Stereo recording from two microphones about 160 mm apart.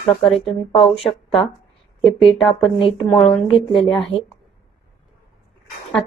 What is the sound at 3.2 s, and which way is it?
Speech, 40° left (ahead or behind).